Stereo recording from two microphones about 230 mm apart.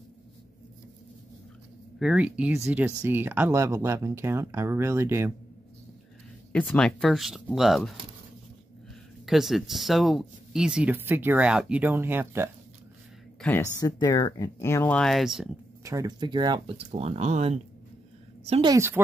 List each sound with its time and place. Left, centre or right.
2.0 s speech: centre
6.5 s speech: centre
9.2 s speech: centre
13.4 s speech: centre
15.8 s speech: centre